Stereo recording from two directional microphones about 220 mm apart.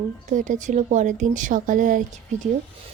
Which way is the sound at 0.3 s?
35° right (ahead or behind).